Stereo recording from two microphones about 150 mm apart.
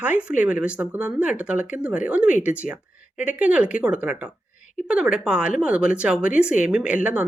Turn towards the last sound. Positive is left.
turn(degrees=-5)  # may be behind; listen again after turning